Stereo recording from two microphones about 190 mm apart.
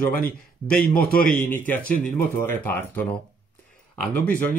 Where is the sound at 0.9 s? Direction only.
50° left (ahead or behind).